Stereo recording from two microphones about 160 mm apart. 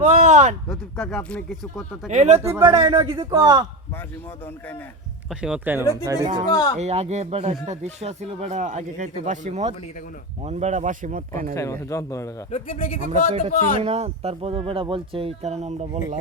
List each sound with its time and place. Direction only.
0.1 s speech: 45° right (ahead or behind)
0.7 s speech: 5° left (ahead or behind)
2.0 s speech: 45° right (ahead or behind)
2.6 s a man's voice: 25° right (ahead or behind)
5.3 s speech: 5° right (ahead or behind)
5.8 s a man's voice: 20° left (ahead or behind)
6.7 s speech: 40° right (ahead or behind)
11.5 s a man's voice: 20° left (ahead or behind)
12.5 s speech: 50° left (ahead or behind)
13.1 s speech: 40° right (ahead or behind)